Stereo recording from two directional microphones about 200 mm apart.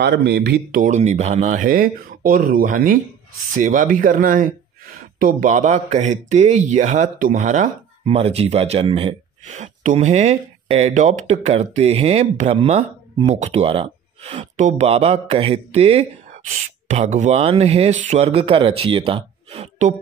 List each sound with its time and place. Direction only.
0.0 s a man's voice: 55° right (ahead or behind); by 20.0 s 35° right (ahead or behind)